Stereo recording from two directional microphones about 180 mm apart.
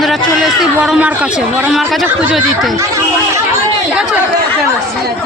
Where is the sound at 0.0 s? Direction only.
Centre (ahead or behind).